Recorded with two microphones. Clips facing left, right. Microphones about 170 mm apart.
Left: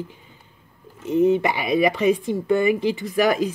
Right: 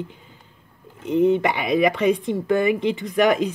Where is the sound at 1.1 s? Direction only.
5° left (ahead or behind).